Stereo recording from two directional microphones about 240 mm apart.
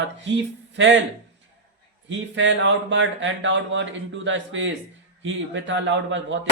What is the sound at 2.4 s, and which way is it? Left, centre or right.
Speech, right.